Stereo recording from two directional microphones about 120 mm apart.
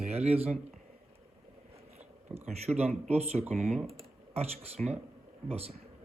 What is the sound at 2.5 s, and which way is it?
Speech, 65° right (ahead or behind).